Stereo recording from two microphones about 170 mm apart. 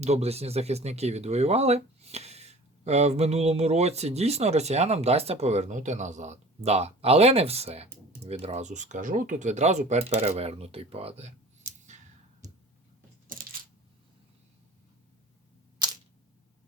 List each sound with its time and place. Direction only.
0.0 s speech: 40° right (ahead or behind)